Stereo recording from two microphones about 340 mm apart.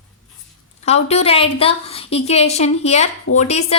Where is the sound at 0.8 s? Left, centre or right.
Centre.